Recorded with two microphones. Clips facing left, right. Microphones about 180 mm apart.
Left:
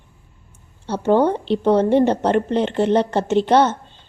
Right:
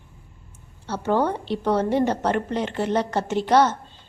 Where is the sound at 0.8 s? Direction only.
25° left (ahead or behind).